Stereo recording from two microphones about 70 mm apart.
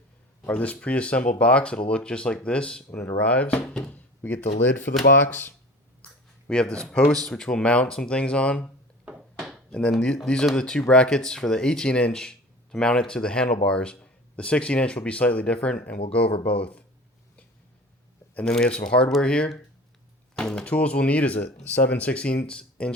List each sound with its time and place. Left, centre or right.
0.4 s speech: centre
6.5 s speech: centre
9.4 s a sound: centre
9.9 s speech: centre
18.4 s speech: centre
20.3 s music: centre
20.7 s speech: centre